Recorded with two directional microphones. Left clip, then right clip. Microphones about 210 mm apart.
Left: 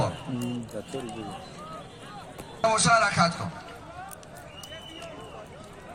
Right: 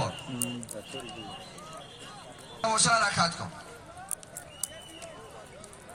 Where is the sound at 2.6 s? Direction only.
55° right (ahead or behind).